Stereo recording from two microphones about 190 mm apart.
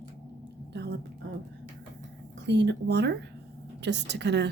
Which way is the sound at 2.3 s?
65° right (ahead or behind).